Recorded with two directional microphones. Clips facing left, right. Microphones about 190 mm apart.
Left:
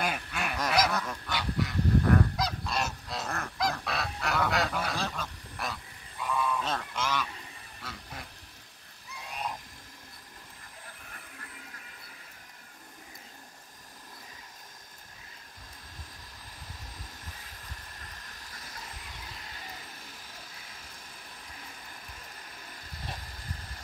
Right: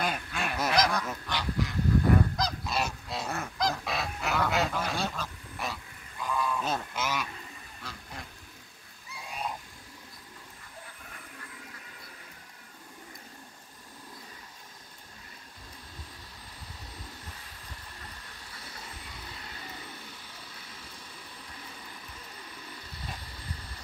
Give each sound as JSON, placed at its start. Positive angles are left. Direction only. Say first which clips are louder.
{"t": 0.0, "sound": "goose", "louder": "right 1 dB", "side_deg": 5}
{"t": 7.8, "sound": "quack", "louder": "even", "side_deg": 0}
{"t": 9.1, "sound": "frog", "louder": "right 1 dB", "side_deg": 0}